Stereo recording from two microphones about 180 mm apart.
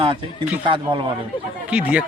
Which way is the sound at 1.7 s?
5° right (ahead or behind).